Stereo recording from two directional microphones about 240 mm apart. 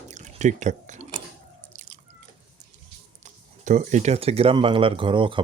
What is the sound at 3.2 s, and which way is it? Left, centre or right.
Speech, right.